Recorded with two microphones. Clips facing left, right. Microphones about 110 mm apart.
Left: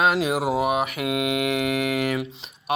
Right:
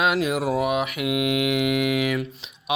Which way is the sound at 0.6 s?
50° left (ahead or behind).